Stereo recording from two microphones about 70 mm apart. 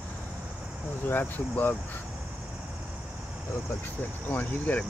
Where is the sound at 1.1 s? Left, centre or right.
Left.